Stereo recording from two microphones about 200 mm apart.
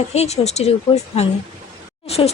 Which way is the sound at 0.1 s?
30° left (ahead or behind).